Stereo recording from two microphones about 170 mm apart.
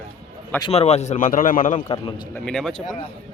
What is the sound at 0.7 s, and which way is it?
A man's voice, 40° left (ahead or behind).